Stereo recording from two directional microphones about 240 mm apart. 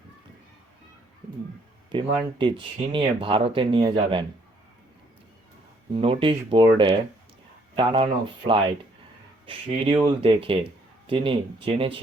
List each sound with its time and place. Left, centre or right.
1.9 s speech: centre
5.9 s speech: right